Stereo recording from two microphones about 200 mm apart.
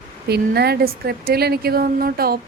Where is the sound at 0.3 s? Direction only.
55° right (ahead or behind).